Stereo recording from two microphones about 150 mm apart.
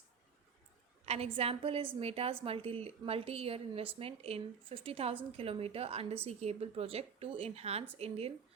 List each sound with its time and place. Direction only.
1.0 s a woman's voice: 45° right (ahead or behind)